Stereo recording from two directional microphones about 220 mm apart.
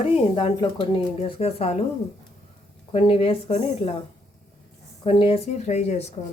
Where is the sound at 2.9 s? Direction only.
25° left (ahead or behind).